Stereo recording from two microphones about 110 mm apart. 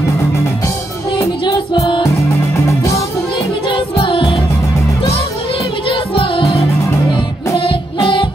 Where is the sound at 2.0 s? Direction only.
25° left (ahead or behind).